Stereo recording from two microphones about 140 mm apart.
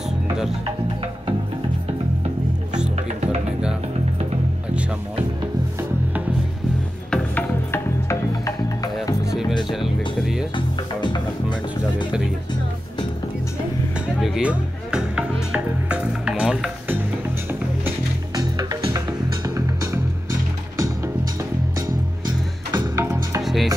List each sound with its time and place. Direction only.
7.1 s music: 15° left (ahead or behind)
9.2 s music: 5° right (ahead or behind)
11.0 s music: 30° left (ahead or behind)
14.2 s music: 5° right (ahead or behind)
18.3 s music: 25° right (ahead or behind)
22.8 s music: 20° right (ahead or behind)
23.4 s music: centre (ahead or behind)